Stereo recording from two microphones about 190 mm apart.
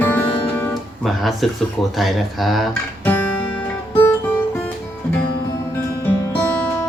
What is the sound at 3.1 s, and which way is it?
Guitar, 10° left (ahead or behind).